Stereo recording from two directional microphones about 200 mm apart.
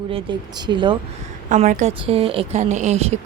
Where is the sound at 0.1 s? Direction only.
20° right (ahead or behind).